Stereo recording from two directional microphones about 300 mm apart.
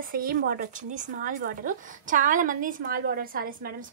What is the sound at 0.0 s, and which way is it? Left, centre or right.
A woman's voice, right.